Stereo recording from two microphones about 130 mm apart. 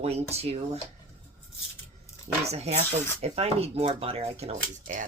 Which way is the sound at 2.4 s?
55° right (ahead or behind).